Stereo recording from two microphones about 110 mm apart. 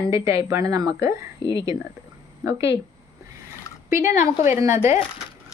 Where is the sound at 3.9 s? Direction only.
25° right (ahead or behind).